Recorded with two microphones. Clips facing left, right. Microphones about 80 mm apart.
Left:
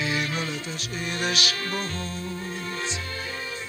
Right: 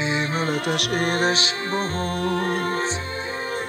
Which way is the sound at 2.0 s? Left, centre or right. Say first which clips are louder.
Right 10 dB; right.